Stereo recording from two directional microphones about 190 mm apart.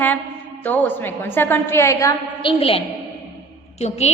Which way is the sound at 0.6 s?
10° left (ahead or behind).